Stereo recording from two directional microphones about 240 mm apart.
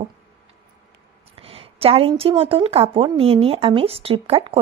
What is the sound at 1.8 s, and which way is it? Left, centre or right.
Speech, right.